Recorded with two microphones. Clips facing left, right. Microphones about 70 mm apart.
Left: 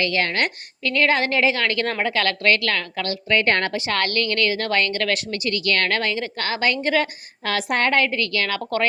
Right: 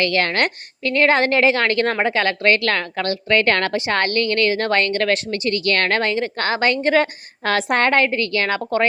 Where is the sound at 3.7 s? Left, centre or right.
Right.